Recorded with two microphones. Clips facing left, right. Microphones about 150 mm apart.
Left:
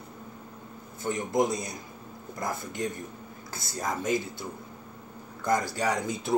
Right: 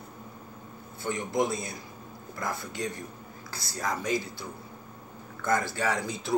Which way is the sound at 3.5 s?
20° left (ahead or behind).